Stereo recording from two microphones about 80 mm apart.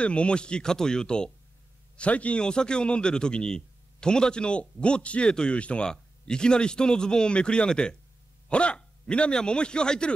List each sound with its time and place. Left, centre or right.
0.0 s a man's voice: centre